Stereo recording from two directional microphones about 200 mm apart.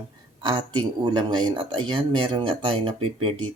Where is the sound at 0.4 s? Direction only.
25° right (ahead or behind).